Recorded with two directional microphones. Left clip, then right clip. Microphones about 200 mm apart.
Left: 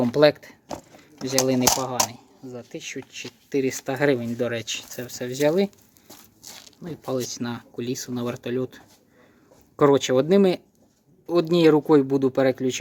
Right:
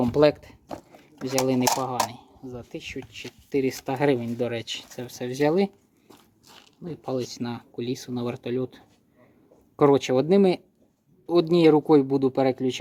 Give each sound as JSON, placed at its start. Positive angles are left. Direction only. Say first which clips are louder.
{"t": 0.0, "sound": "speech", "louder": "left 2 dB", "side_deg": -5}
{"t": 6.1, "sound": "a sound", "louder": "left 7 dB", "side_deg": 40}
{"t": 6.8, "sound": "speech", "louder": "left 2 dB", "side_deg": -5}